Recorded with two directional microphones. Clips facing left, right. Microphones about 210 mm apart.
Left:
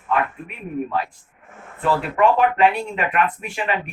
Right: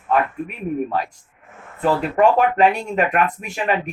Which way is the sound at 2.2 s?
40° right (ahead or behind).